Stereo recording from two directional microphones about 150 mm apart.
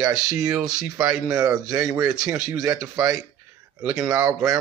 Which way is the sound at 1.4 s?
25° right (ahead or behind).